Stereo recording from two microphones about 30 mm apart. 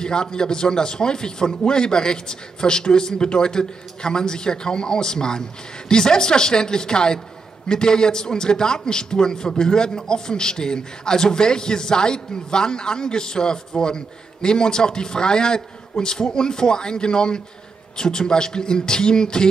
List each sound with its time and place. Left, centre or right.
0.0 s a man's voice: left